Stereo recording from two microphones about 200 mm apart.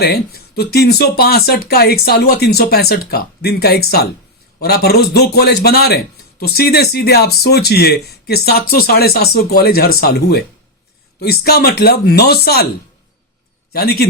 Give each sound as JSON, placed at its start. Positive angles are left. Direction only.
{"t": 0.0, "sound": "speech", "side_deg": 50}
{"t": 13.7, "sound": "speech", "side_deg": 50}